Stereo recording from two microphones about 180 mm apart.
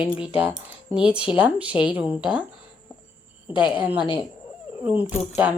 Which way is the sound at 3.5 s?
10° right (ahead or behind).